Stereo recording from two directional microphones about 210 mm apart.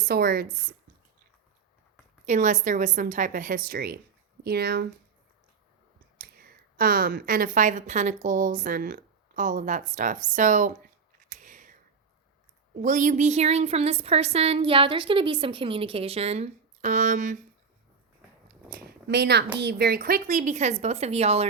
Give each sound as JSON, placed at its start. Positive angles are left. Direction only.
{"t": 0.0, "sound": "speech", "side_deg": -45}
{"t": 2.2, "sound": "a woman's voice", "side_deg": -35}
{"t": 6.1, "sound": "a woman's voice", "side_deg": -45}
{"t": 11.3, "sound": "a sound", "side_deg": -35}
{"t": 12.8, "sound": "speech", "side_deg": -35}
{"t": 18.7, "sound": "speech", "side_deg": -50}